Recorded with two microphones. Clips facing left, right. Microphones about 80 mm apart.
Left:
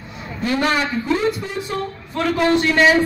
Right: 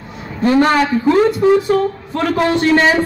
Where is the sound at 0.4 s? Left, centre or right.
Right.